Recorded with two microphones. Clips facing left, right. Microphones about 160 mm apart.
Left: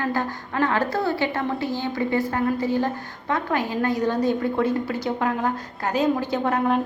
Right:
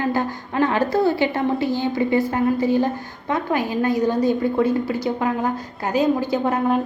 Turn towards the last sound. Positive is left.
turn(degrees=-5)  # may be behind; listen again after turning